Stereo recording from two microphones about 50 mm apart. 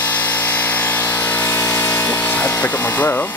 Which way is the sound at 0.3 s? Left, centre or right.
Left.